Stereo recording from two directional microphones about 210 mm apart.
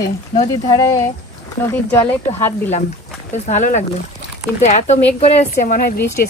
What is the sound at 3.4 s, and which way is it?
Speech, 35° left (ahead or behind).